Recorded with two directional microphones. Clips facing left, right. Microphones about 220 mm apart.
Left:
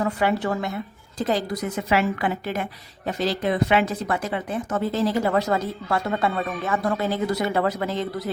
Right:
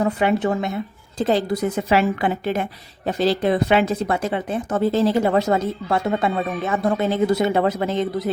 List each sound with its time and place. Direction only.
0.0 s speech: 20° right (ahead or behind)